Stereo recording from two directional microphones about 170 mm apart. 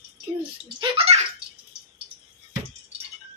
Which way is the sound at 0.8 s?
35° right (ahead or behind).